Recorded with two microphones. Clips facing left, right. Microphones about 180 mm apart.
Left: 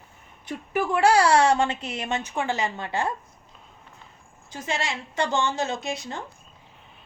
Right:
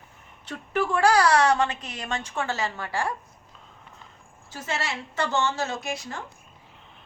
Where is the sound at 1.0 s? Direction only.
25° left (ahead or behind).